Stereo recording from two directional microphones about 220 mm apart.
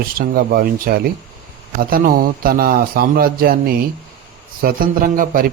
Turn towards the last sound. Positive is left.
turn(degrees=-40)  # may be behind; listen again after turning